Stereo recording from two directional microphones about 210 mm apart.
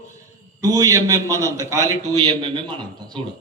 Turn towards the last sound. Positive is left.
turn(degrees=-25)  # may be behind; listen again after turning